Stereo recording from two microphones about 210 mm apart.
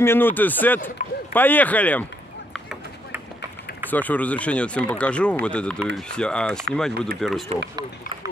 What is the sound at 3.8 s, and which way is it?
Speech, 10° left (ahead or behind).